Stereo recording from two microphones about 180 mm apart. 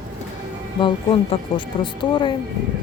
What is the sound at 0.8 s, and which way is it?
Speech, 25° left (ahead or behind).